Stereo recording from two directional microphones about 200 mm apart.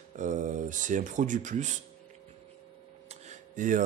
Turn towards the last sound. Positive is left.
turn(degrees=-40)  # may be behind; listen again after turning